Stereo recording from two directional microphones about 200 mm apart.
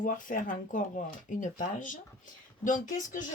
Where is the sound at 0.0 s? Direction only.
40° left (ahead or behind).